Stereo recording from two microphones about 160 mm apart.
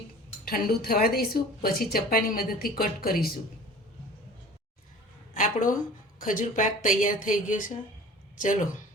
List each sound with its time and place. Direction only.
0.4 s a woman's voice: 75° left (ahead or behind)
5.3 s speech: 55° left (ahead or behind)